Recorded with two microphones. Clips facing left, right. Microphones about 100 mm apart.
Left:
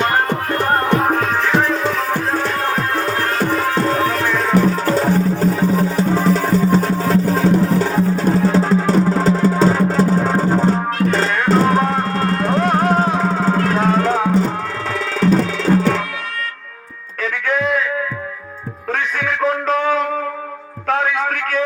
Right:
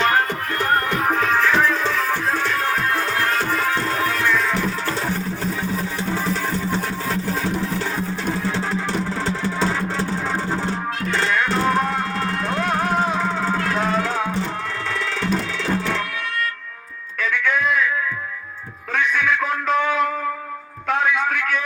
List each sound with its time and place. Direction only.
0.9 s music: 35° left (ahead or behind)
17.3 s music: 35° left (ahead or behind)
18.9 s music: 40° left (ahead or behind)
20.8 s a sound: 40° left (ahead or behind)